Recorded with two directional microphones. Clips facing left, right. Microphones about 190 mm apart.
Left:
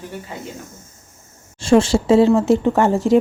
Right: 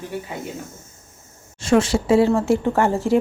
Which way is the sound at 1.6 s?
30° left (ahead or behind).